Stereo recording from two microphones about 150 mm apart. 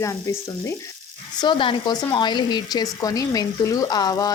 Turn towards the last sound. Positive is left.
turn(degrees=25)  # may be behind; listen again after turning